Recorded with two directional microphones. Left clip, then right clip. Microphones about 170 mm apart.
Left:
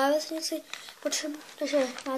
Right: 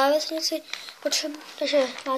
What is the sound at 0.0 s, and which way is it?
A child's voice, 30° left (ahead or behind).